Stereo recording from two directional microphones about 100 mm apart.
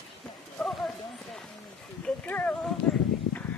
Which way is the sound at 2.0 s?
15° left (ahead or behind).